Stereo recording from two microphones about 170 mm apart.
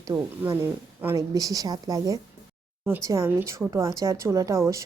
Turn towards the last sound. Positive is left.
turn(degrees=-15)  # may be behind; listen again after turning